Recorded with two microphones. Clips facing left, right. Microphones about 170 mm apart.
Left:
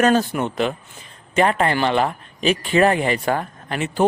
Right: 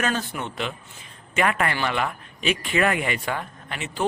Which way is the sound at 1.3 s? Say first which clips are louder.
Left 5 dB; 30° left (ahead or behind).